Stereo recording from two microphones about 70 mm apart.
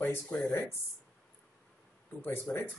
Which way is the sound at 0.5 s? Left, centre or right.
Left.